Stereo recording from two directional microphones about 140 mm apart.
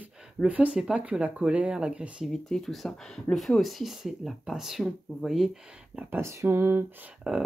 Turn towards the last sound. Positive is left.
turn(degrees=-10)  # may be behind; listen again after turning